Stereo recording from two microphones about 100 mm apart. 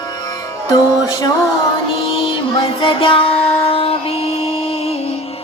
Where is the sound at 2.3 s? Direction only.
60° left (ahead or behind); by 4.9 s 80° left.